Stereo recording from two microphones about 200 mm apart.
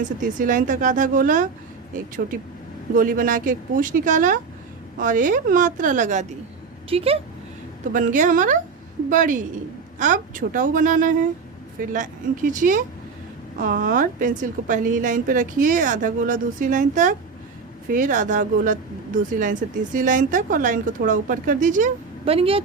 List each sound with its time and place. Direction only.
0.2 s speech: 40° right (ahead or behind)
2.9 s speech: 40° right (ahead or behind)
7.9 s speech: 40° right (ahead or behind)